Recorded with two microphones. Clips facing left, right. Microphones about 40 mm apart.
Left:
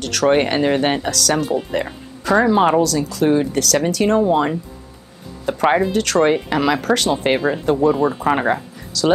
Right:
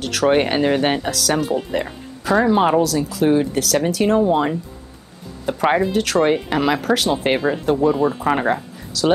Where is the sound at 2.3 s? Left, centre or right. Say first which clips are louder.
Left 1 dB; centre.